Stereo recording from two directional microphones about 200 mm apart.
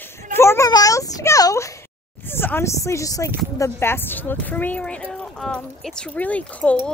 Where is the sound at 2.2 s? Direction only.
10° left (ahead or behind).